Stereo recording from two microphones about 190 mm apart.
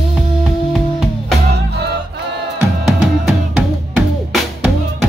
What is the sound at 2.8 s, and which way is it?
Music, 5° right (ahead or behind).